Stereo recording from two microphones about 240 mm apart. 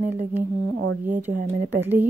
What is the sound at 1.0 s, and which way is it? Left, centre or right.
Speech, centre.